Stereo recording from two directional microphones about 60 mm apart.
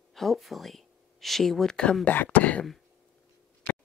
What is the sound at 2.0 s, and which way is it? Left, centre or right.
Speech, left.